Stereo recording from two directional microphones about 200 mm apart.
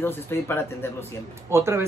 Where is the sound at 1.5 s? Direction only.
15° right (ahead or behind).